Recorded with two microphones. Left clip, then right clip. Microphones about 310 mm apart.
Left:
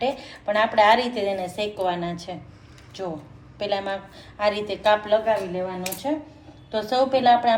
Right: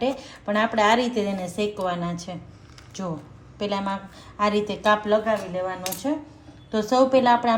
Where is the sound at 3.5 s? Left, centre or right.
Right.